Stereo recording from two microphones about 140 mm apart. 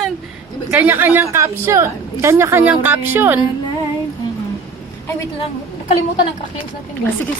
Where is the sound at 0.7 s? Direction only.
15° right (ahead or behind).